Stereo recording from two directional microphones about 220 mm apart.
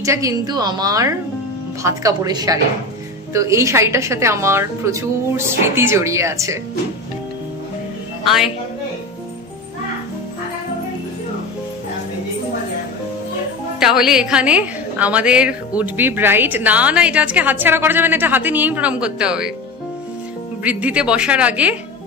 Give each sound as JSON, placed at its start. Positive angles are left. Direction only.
{"t": 0.0, "sound": "a woman's voice", "side_deg": -15}
{"t": 8.2, "sound": "a woman's voice", "side_deg": 0}
{"t": 13.7, "sound": "a woman's voice", "side_deg": 0}
{"t": 20.6, "sound": "a woman's voice", "side_deg": -5}